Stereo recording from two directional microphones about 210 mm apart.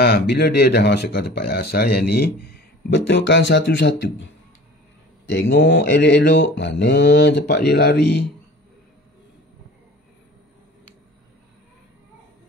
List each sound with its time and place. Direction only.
0.0 s speech: 50° left (ahead or behind)
5.2 s mantra: 60° left (ahead or behind)